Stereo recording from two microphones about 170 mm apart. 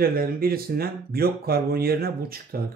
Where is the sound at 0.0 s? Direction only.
60° right (ahead or behind).